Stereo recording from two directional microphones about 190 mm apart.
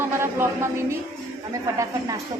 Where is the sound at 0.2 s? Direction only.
15° right (ahead or behind).